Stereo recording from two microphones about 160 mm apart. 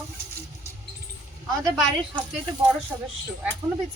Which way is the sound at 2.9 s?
15° right (ahead or behind).